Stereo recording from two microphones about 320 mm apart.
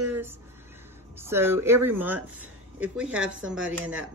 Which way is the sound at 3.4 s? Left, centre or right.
Right.